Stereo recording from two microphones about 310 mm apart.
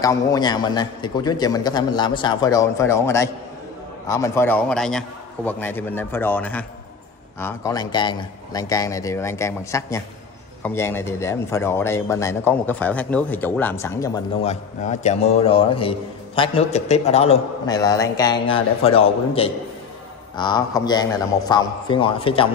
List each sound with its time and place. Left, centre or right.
0.0 s a man's voice: centre